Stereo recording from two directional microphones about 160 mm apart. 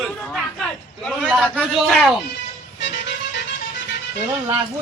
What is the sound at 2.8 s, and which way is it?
Music, 90° left.